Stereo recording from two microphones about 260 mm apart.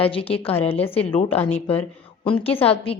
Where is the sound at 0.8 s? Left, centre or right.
Centre.